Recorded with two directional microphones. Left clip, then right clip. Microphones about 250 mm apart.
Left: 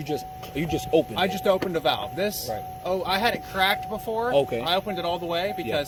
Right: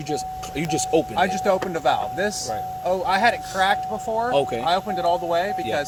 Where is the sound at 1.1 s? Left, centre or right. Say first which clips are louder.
Right 3 dB; left.